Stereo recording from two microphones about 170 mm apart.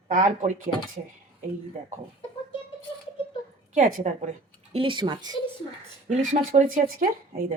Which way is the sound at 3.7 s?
45° right (ahead or behind).